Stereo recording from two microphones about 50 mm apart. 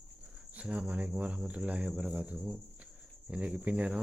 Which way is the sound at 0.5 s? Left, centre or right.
Right.